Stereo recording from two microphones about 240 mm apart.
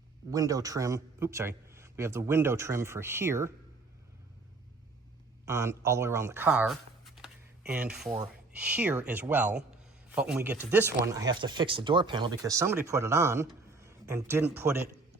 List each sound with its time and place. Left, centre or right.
0.3 s a man's voice: centre
5.5 s speech: centre
8.0 s speech: right
8.5 s a man's voice: centre